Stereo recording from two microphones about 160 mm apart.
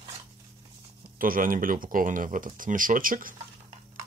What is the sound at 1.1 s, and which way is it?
Speech, 60° right (ahead or behind).